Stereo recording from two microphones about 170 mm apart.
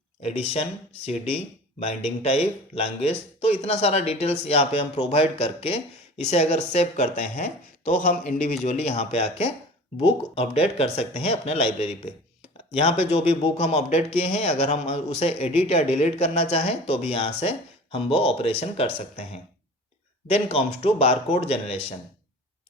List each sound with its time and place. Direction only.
0.2 s speech: 35° left (ahead or behind)